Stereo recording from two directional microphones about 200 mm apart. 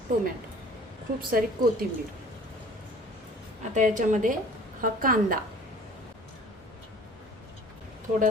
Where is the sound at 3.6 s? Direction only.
40° right (ahead or behind).